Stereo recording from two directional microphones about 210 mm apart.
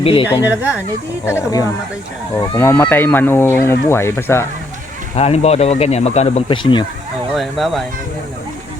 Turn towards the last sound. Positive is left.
turn(degrees=0)  # may be behind; listen again after turning